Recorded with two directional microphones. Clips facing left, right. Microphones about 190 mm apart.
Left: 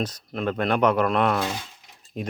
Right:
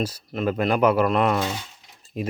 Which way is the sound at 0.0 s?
10° right (ahead or behind).